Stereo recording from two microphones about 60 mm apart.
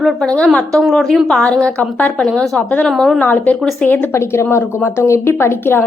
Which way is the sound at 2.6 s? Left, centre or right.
Left.